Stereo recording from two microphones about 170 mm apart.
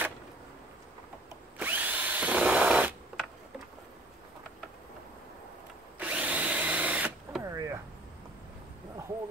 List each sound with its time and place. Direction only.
1.6 s drill: 10° right (ahead or behind)
5.9 s drill: 10° right (ahead or behind)
7.4 s a sound: 20° right (ahead or behind)